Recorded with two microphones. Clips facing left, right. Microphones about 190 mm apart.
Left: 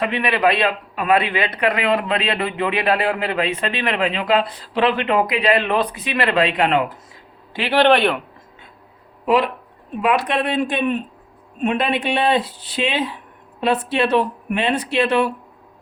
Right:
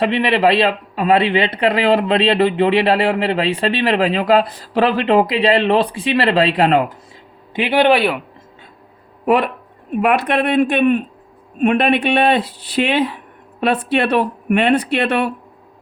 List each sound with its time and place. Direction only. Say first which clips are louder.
0.0 s a man's voice: right 4 dB; 30° right (ahead or behind)
7.5 s speech: right 2 dB; 15° right (ahead or behind)
9.2 s speech: right 2 dB; 55° right (ahead or behind)